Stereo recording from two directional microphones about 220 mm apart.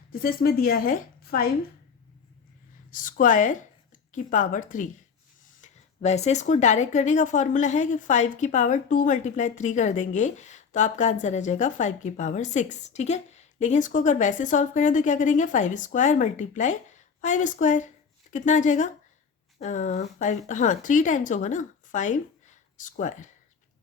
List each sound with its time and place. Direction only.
0.1 s a woman's voice: 45° left (ahead or behind)
2.9 s a woman's voice: 40° left (ahead or behind)